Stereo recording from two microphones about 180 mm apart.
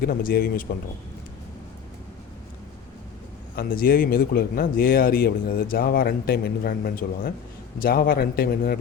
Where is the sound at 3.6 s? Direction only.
55° left (ahead or behind).